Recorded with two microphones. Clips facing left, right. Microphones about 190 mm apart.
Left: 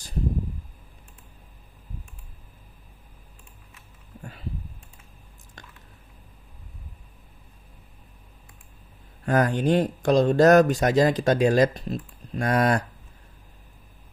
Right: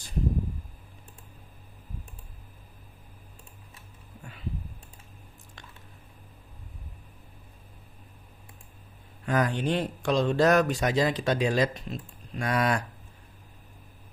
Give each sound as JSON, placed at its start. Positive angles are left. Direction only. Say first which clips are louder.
{"t": 4.2, "sound": "a sound", "louder": "left 5 dB", "side_deg": 40}
{"t": 5.6, "sound": "squish", "louder": "left 3 dB", "side_deg": 40}
{"t": 9.2, "sound": "speech", "louder": "left 5 dB", "side_deg": 45}